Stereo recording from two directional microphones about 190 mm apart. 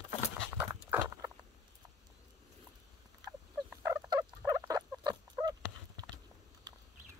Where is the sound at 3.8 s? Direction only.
15° right (ahead or behind).